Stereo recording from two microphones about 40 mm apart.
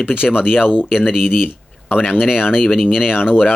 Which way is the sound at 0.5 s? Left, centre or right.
Centre.